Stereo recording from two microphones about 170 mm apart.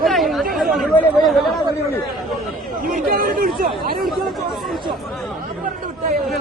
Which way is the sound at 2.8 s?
55° right (ahead or behind).